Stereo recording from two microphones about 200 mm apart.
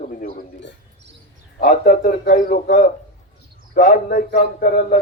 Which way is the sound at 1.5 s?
45° left (ahead or behind).